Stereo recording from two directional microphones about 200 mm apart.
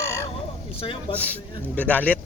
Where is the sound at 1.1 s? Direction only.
5° left (ahead or behind).